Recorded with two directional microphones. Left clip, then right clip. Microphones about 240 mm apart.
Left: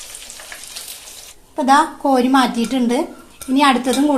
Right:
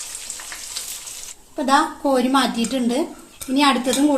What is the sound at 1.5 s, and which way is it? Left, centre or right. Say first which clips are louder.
A woman's voice: left 4 dB; left.